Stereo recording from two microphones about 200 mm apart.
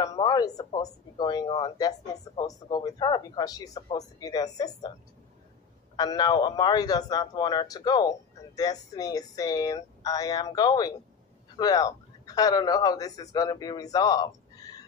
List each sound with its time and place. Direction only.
0.0 s a man's voice: 20° left (ahead or behind)
5.9 s a man's voice: 20° left (ahead or behind)